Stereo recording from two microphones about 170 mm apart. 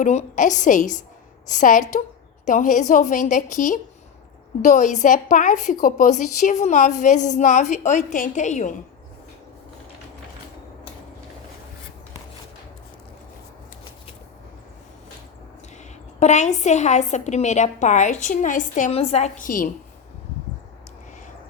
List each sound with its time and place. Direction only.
0.0 s a woman's voice: 45° left (ahead or behind)
16.2 s a woman's voice: 45° left (ahead or behind)